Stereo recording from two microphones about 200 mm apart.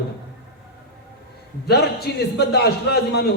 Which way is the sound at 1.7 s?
55° left (ahead or behind).